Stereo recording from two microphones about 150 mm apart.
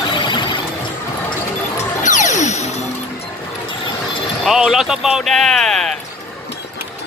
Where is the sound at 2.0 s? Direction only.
55° left (ahead or behind).